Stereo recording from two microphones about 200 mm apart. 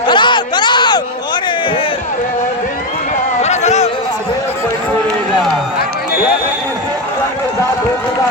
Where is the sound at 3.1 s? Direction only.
35° left (ahead or behind).